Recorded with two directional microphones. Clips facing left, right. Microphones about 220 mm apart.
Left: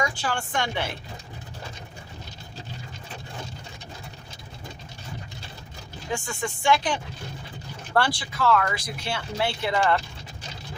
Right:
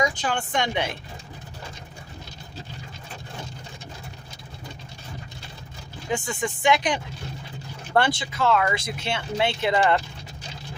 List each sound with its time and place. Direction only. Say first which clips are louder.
0.0 s speech: right 3 dB; 20° right (ahead or behind)
6.1 s speech: right 3 dB; 20° right (ahead or behind)